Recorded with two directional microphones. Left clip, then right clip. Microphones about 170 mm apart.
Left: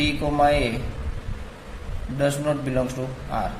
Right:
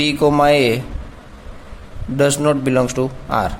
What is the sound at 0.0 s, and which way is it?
Mantra, 65° right (ahead or behind).